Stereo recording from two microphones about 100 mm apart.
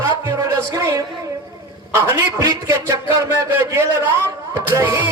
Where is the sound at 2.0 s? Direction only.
25° right (ahead or behind).